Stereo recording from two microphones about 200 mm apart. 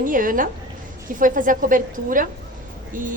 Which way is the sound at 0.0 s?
40° right (ahead or behind).